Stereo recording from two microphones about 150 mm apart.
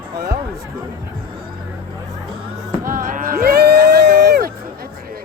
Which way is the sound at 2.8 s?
65° right (ahead or behind).